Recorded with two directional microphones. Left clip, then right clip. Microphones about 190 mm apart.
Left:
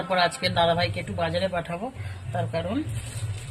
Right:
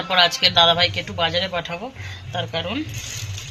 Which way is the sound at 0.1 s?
5° left (ahead or behind).